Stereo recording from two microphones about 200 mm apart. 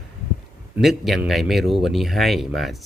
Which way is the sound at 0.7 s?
Centre (ahead or behind).